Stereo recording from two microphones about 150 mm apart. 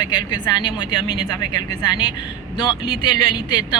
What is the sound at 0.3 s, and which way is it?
A woman's voice, 30° left (ahead or behind).